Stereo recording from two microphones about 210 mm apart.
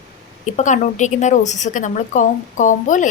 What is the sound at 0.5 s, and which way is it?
A woman's voice, 35° left (ahead or behind).